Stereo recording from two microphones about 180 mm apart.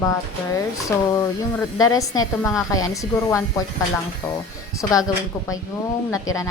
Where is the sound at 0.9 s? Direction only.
20° left (ahead or behind).